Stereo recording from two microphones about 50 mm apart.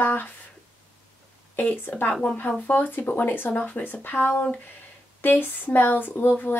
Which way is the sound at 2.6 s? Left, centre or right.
Left.